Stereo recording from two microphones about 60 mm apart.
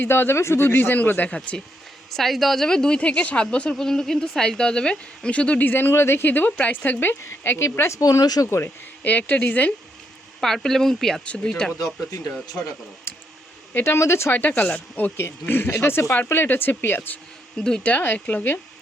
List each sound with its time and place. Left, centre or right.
0.0 s speech: left
2.0 s speech: centre; by 8.0 s left
8.2 s speech: left
8.4 s speech: left
9.0 s speech: left
10.4 s speech: centre
12.1 s speech: left
13.1 s a sound: left
13.7 s speech: left
14.3 s speech: left
15.1 s speech: left
17.6 s speech: centre
17.8 s speech: left